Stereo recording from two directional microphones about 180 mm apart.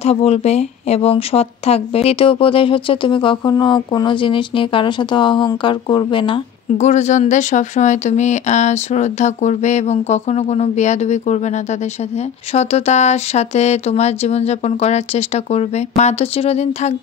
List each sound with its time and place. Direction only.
0.0 s speech: 35° left (ahead or behind)
6.8 s speech: 40° left (ahead or behind)